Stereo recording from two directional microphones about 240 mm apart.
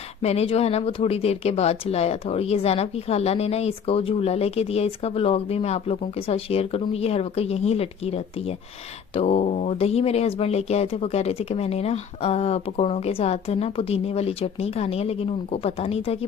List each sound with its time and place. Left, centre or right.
0.2 s speech: left